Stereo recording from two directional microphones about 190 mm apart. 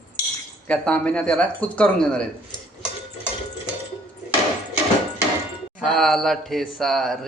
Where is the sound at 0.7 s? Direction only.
5° left (ahead or behind).